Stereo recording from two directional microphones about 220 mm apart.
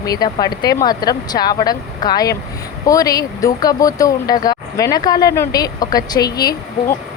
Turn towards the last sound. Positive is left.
turn(degrees=15)  # may be behind; listen again after turning